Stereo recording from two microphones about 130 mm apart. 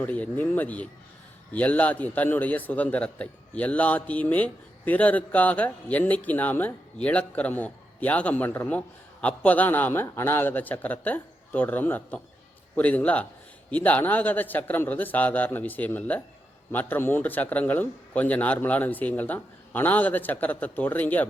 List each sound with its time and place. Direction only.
0.0 s a man's voice: 10° left (ahead or behind)